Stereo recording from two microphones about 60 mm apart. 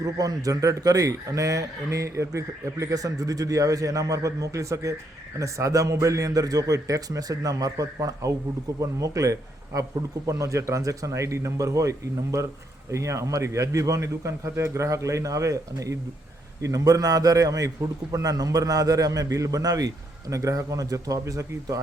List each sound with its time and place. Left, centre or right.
0.0 s a man's voice: right
18.1 s a man's voice: right
20.3 s a man's voice: right